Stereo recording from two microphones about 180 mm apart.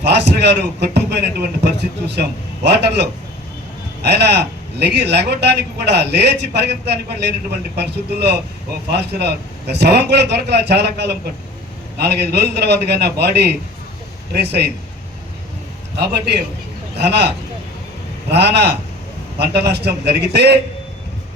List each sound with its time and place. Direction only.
0.0 s a man's voice: 70° right (ahead or behind)
17.0 s a man's voice: 70° right (ahead or behind)